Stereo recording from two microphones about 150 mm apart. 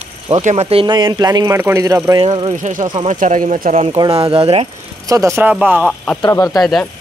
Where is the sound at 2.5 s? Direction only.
55° right (ahead or behind).